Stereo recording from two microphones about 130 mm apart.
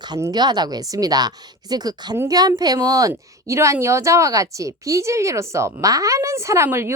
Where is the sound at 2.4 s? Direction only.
30° right (ahead or behind).